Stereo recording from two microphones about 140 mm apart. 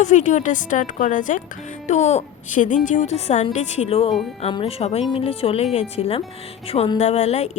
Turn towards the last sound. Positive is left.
turn(degrees=50)  # may be behind; listen again after turning